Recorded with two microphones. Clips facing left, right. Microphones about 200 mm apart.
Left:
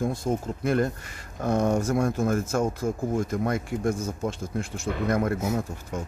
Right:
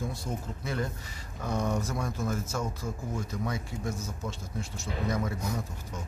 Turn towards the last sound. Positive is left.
turn(degrees=55)  # may be behind; listen again after turning